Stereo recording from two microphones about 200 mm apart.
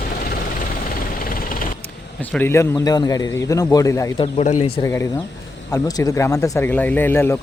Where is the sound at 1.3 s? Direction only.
45° left (ahead or behind).